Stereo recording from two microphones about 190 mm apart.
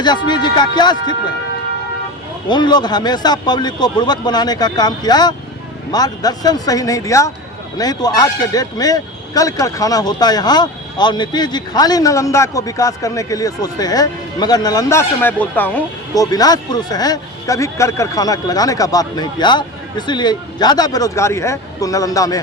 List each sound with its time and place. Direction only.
0.0 s speech: 25° left (ahead or behind)
2.5 s speech: 25° left (ahead or behind)